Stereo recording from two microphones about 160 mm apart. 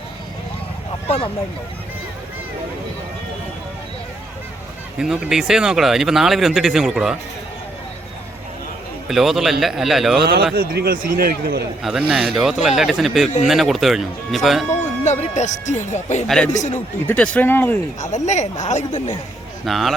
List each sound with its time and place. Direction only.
1.0 s speech: 40° left (ahead or behind)
4.9 s speech: 5° right (ahead or behind)
9.0 s speech: centre (ahead or behind)
10.2 s a man's voice: 80° right
11.8 s speech: 5° right (ahead or behind)
15.0 s speech: 45° left (ahead or behind)
16.2 s speech: 5° left (ahead or behind)
16.5 s speech: 50° left (ahead or behind)
17.1 s speech: 5° left (ahead or behind)
18.0 s speech: 50° left (ahead or behind)
19.6 s speech: centre (ahead or behind)